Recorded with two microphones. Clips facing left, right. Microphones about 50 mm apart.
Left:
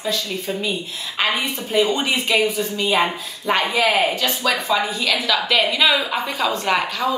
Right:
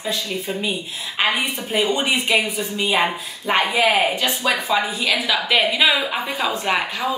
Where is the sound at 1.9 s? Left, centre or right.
Centre.